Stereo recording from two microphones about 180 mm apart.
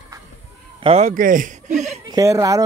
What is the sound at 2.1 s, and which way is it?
Speech, 20° right (ahead or behind).